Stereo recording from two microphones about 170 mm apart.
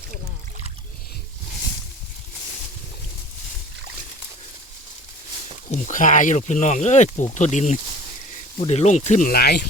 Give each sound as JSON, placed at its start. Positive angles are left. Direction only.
{"t": 5.7, "sound": "speech", "side_deg": 50}
{"t": 9.3, "sound": "speech", "side_deg": 70}